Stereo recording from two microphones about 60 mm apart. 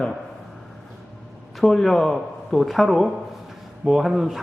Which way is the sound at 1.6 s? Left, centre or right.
Centre.